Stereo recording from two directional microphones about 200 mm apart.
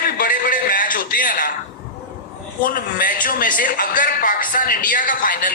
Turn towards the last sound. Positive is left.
turn(degrees=40)  # may be behind; listen again after turning